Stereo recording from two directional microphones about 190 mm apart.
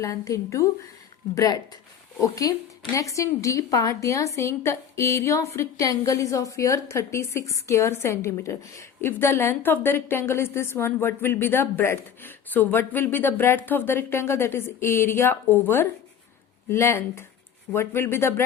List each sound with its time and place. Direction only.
0.0 s a woman's voice: 15° left (ahead or behind)